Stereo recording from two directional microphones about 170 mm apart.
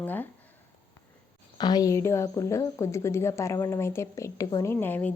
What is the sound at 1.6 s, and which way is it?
A woman's voice, 25° left (ahead or behind).